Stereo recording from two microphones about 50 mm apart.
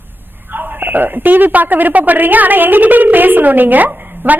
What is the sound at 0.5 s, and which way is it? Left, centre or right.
A woman's voice, right.